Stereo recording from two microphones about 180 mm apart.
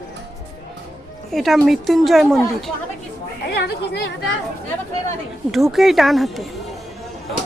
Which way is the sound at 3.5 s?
65° left (ahead or behind).